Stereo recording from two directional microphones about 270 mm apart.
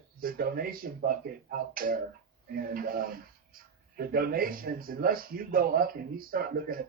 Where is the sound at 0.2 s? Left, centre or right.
Right.